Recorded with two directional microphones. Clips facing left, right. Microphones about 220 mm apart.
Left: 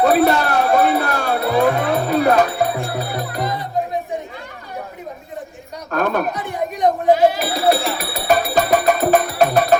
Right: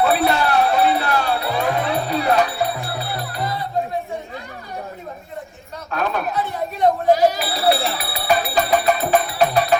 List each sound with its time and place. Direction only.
0.0 s music: 45° left (ahead or behind)
3.4 s music: 20° left (ahead or behind)
5.9 s a sound: 50° left (ahead or behind)
6.3 s a sound: 15° left (ahead or behind)
7.3 s sheep: 45° left (ahead or behind)
7.9 s music: 45° left (ahead or behind)